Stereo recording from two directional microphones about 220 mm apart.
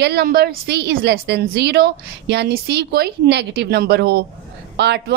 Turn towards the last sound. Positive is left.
turn(degrees=-50)  # may be behind; listen again after turning